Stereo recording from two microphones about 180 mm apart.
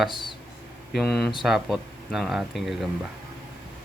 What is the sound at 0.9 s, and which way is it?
Speech, centre (ahead or behind).